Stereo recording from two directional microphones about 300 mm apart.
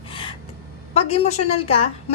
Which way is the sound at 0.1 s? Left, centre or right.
Centre.